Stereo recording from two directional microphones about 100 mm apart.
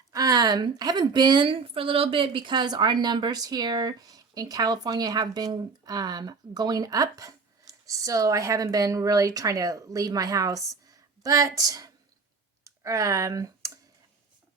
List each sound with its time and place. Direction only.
0.1 s speech: 40° right (ahead or behind)
12.6 s clicking: 30° right (ahead or behind)